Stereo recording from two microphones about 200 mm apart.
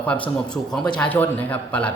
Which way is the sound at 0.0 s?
5° left (ahead or behind).